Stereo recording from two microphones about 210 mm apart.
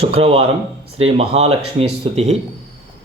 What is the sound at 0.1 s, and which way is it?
Speech, 25° right (ahead or behind).